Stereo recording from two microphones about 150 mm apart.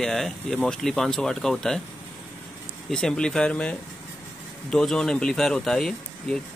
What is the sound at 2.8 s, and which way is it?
Speech, 5° left (ahead or behind).